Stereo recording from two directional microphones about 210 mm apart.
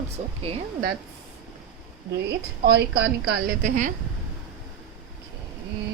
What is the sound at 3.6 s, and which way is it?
Speech, 35° right (ahead or behind).